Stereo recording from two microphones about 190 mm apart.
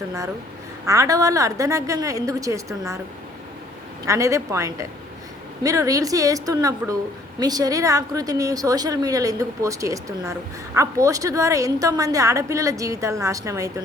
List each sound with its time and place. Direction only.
0.9 s a woman's voice: 15° right (ahead or behind)
4.0 s a woman's voice: 15° right (ahead or behind)